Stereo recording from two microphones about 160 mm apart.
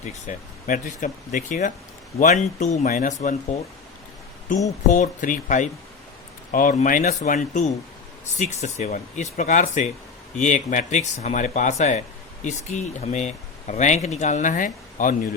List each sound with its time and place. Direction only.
0.0 s speech: 50° left (ahead or behind)
4.9 s speech: 55° left (ahead or behind)